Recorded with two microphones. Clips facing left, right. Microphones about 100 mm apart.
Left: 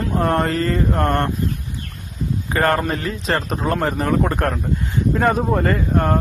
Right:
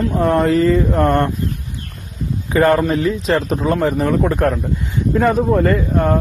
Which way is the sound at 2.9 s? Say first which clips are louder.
Right 6 dB; centre (ahead or behind).